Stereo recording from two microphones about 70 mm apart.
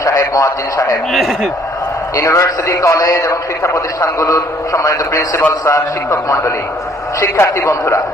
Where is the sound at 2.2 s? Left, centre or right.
Left.